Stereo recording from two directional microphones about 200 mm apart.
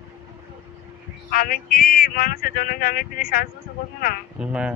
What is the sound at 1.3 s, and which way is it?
Speech, 45° left (ahead or behind).